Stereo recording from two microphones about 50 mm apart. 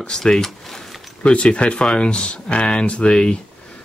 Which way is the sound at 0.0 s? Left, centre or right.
Centre.